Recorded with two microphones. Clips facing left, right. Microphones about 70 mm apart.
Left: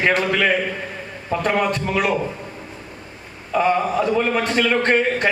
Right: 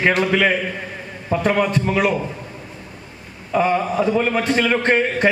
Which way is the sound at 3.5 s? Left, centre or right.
Centre.